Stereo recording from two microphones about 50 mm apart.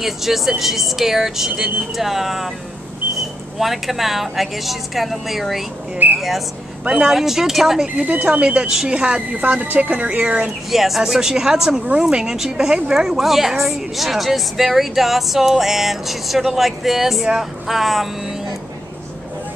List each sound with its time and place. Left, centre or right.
0.0 s a woman's voice: centre
3.5 s a woman's voice: centre
8.0 s speech: right
8.3 s speech: right
9.4 s speech: right
10.7 s a woman's voice: centre